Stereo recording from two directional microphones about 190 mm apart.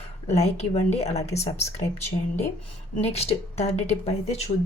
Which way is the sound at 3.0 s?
35° left (ahead or behind).